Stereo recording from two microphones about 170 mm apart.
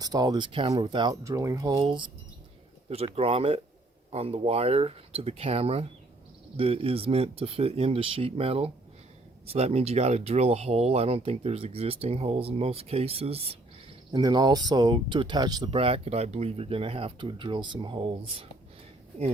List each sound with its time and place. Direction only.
0.0 s speech: 25° right (ahead or behind)
14.1 s speech: 25° right (ahead or behind)